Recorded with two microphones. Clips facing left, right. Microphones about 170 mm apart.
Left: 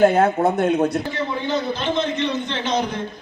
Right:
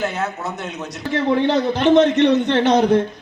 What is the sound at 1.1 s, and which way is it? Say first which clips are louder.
A man's voice: right 6 dB; 75° right (ahead or behind).